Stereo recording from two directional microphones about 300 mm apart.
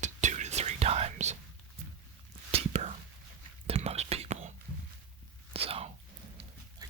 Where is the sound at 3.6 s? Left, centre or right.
Right.